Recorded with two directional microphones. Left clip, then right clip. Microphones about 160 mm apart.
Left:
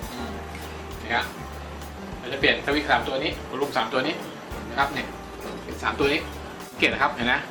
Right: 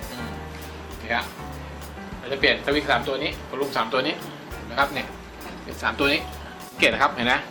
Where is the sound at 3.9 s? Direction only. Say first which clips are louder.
Right 3 dB; 50° right (ahead or behind).